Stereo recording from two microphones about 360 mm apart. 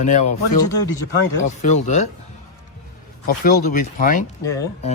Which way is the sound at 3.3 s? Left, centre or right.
Left.